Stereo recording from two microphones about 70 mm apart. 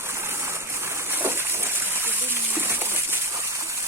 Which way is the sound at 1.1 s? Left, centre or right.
Right.